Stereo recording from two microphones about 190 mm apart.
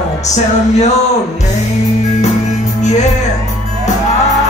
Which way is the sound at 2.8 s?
40° left (ahead or behind).